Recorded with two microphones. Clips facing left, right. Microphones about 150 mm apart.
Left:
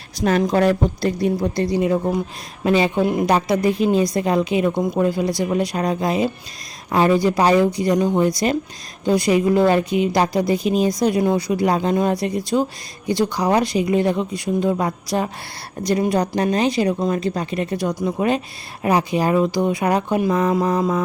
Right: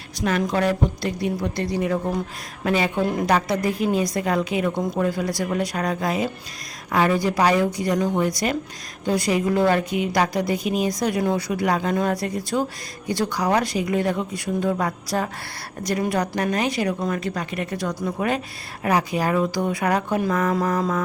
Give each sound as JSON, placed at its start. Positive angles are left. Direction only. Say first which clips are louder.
{"t": 0.2, "sound": "a woman's voice", "louder": "left 5 dB", "side_deg": 35}